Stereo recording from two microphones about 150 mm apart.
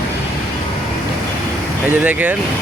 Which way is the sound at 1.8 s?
10° right (ahead or behind).